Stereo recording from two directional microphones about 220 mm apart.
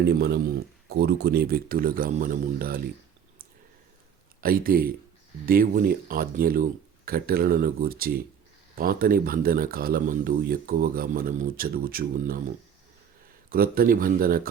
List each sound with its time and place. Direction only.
0.0 s speech: 50° right (ahead or behind)
4.4 s speech: 40° right (ahead or behind)
13.5 s speech: 40° right (ahead or behind)